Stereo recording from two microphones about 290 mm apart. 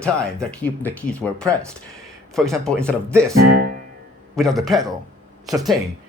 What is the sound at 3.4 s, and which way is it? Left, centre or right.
Music, right.